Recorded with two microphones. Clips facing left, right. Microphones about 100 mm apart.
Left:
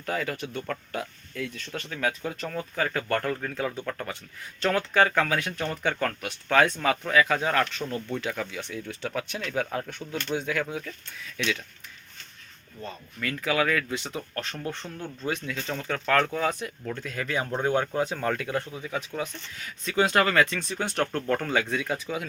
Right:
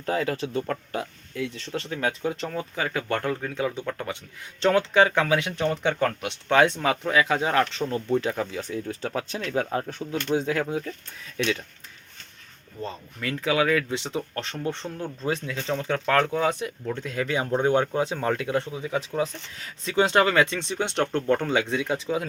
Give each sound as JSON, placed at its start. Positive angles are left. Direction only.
{"t": 0.0, "sound": "speech", "side_deg": -30}
{"t": 13.1, "sound": "speech", "side_deg": -25}